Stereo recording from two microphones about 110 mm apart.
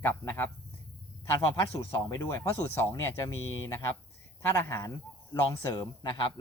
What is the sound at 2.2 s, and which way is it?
Speech, 25° left (ahead or behind).